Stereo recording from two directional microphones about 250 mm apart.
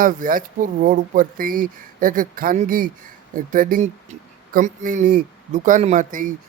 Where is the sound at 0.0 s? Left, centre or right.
Right.